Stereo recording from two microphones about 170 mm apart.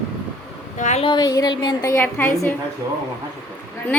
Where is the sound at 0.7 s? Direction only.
45° left (ahead or behind).